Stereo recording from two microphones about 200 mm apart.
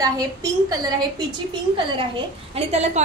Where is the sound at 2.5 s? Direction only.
35° right (ahead or behind).